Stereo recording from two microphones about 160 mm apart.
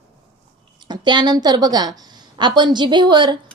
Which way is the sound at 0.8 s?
25° right (ahead or behind).